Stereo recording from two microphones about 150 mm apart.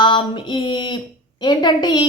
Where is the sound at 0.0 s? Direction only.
30° left (ahead or behind).